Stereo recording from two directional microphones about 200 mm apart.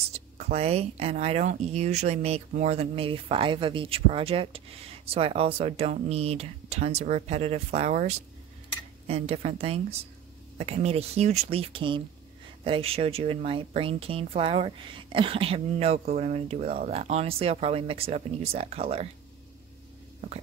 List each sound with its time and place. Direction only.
0.1 s speech: 30° right (ahead or behind)